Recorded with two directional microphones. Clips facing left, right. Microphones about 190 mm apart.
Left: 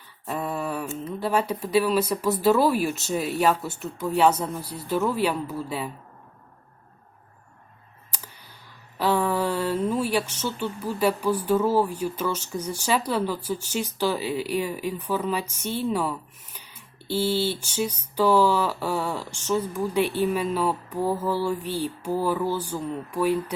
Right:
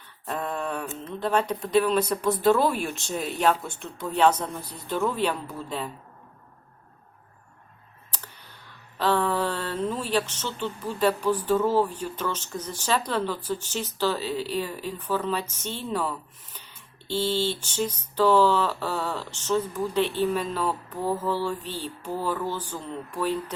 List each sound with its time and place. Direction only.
0.3 s speech: 10° left (ahead or behind)
9.0 s speech: 10° left (ahead or behind)